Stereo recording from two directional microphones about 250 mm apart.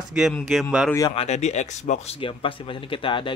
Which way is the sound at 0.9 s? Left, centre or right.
Centre.